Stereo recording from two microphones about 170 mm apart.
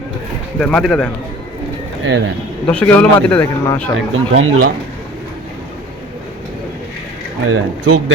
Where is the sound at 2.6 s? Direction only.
10° left (ahead or behind).